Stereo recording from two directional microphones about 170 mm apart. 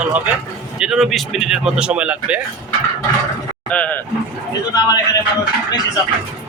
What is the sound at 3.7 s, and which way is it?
Speech, 10° left (ahead or behind).